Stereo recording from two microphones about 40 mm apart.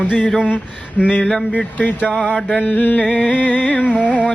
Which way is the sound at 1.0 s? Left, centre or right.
Left.